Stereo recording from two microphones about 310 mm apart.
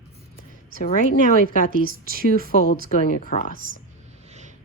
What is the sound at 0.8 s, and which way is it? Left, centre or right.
Speech, left.